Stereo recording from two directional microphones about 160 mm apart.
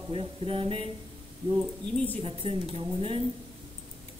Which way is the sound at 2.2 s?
35° right (ahead or behind).